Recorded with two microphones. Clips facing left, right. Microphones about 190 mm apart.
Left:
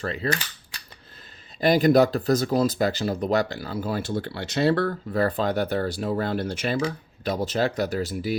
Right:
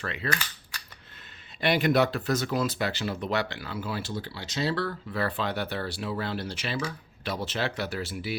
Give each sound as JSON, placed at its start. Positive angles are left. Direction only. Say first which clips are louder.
{"t": 0.0, "sound": "speech", "louder": "left 6 dB", "side_deg": 35}
{"t": 1.6, "sound": "speech", "louder": "left 6 dB", "side_deg": 40}